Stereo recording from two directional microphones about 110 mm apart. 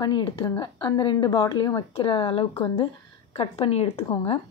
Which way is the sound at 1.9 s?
50° left (ahead or behind).